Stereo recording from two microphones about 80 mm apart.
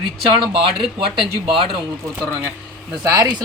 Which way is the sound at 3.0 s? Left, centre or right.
Right.